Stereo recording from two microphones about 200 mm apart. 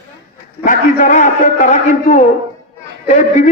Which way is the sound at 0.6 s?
40° left (ahead or behind).